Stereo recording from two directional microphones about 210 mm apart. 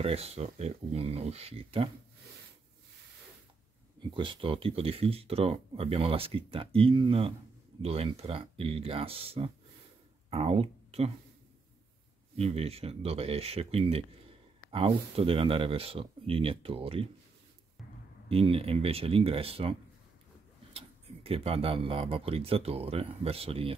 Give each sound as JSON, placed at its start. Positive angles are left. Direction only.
{"t": 0.0, "sound": "speech", "side_deg": -30}
{"t": 4.1, "sound": "speech", "side_deg": -25}
{"t": 12.4, "sound": "speech", "side_deg": -30}
{"t": 18.3, "sound": "speech", "side_deg": -25}
{"t": 20.7, "sound": "speech", "side_deg": -30}